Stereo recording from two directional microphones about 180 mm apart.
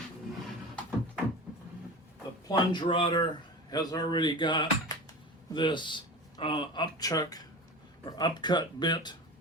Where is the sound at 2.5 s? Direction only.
25° left (ahead or behind).